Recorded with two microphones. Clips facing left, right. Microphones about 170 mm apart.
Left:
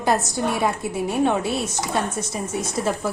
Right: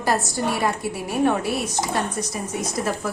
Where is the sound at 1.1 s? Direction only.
25° left (ahead or behind).